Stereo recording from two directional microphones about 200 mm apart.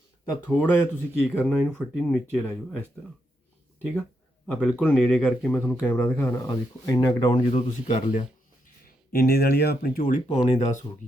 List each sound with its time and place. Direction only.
0.4 s speech: 10° left (ahead or behind)
4.5 s speech: 5° left (ahead or behind); by 7.3 s 20° left (ahead or behind)
7.3 s speech: 35° left (ahead or behind)
9.1 s speech: 55° left (ahead or behind); by 10.8 s 35° left (ahead or behind)